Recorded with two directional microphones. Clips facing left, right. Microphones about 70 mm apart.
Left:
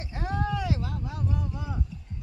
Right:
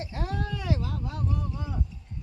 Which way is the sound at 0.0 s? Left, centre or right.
Left.